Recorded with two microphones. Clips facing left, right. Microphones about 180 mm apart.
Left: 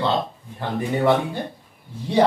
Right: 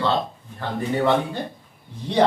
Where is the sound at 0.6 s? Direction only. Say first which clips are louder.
Left 1 dB; 15° left (ahead or behind).